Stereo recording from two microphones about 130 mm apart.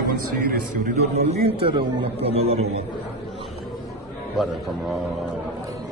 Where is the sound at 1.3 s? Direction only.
45° right (ahead or behind).